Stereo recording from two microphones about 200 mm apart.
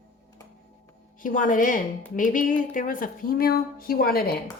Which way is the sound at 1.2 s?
40° left (ahead or behind).